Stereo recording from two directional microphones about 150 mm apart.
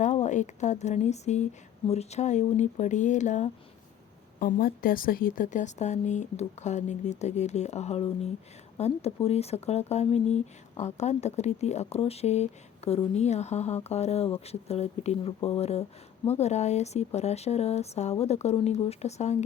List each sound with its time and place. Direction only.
0.0 s speech: 55° left (ahead or behind)
4.4 s speech: 70° left (ahead or behind); by 19.4 s 50° left (ahead or behind)